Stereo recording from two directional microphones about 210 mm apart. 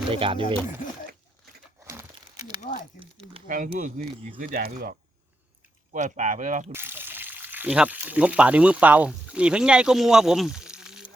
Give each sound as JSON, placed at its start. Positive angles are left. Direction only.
{"t": 0.1, "sound": "speech", "side_deg": -25}
{"t": 0.8, "sound": "zipper", "side_deg": 40}
{"t": 1.9, "sound": "crumpling", "side_deg": -15}
{"t": 3.4, "sound": "speech", "side_deg": -40}
{"t": 6.7, "sound": "speech", "side_deg": -10}